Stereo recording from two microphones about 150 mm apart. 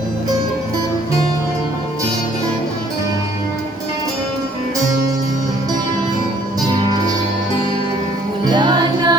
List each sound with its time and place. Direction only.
8.4 s music: 30° right (ahead or behind)